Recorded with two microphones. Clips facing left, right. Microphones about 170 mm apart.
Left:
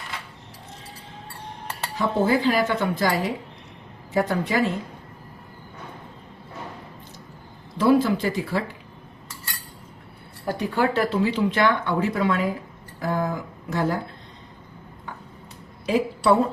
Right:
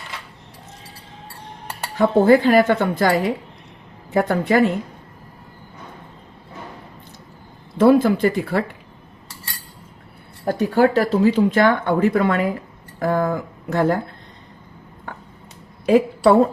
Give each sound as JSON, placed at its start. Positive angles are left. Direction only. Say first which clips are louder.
{"t": 2.0, "sound": "speech", "louder": "right 8 dB", "side_deg": -55}
{"t": 7.8, "sound": "speech", "louder": "right 5 dB", "side_deg": -55}
{"t": 10.4, "sound": "speech", "louder": "right 7 dB", "side_deg": -40}
{"t": 15.1, "sound": "a sound", "louder": "right 3 dB", "side_deg": -55}